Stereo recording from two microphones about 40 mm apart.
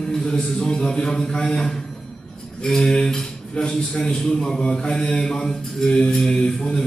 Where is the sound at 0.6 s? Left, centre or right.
Left.